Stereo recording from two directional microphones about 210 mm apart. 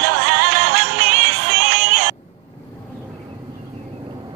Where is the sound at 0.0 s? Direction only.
50° right (ahead or behind).